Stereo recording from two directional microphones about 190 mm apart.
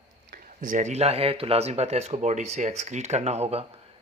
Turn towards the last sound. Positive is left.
turn(degrees=-35)  # may be behind; listen again after turning